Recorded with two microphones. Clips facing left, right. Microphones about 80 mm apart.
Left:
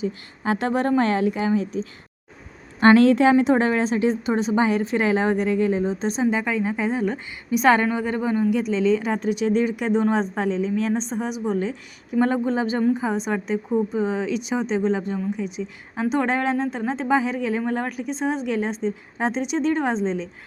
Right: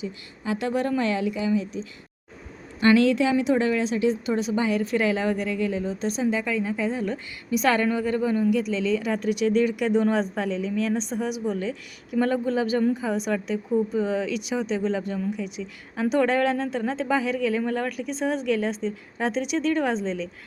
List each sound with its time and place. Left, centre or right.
0.0 s a woman's voice: left